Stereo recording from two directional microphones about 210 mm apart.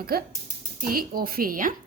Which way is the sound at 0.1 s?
45° right (ahead or behind).